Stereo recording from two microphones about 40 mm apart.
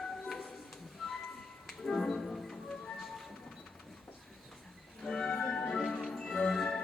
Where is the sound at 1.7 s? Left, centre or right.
Centre.